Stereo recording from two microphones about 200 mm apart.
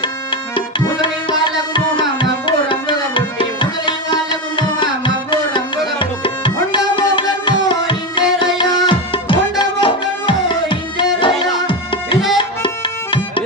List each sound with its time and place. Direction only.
0.0 s music: 25° left (ahead or behind)
1.0 s tabla: 25° left (ahead or behind)
11.6 s music: 25° left (ahead or behind)